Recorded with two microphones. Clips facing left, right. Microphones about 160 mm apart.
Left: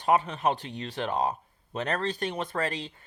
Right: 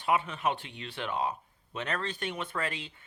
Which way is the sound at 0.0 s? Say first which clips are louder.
Left 4 dB; 40° left (ahead or behind).